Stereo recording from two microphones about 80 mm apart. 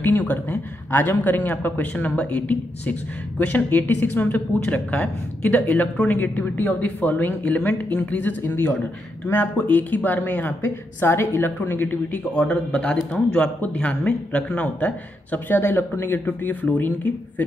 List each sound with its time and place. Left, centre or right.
0.2 s speech: left
10.6 s speech: left